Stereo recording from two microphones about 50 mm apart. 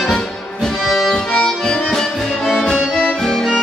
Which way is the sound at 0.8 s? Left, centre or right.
Centre.